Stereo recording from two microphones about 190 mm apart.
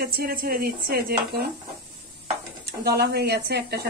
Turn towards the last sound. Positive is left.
turn(degrees=-60)  # may be behind; listen again after turning